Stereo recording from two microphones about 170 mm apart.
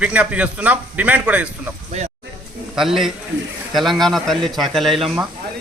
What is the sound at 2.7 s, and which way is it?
A man's voice, centre (ahead or behind).